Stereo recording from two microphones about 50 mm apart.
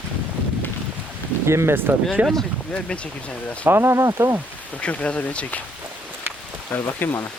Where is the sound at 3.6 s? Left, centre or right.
Right.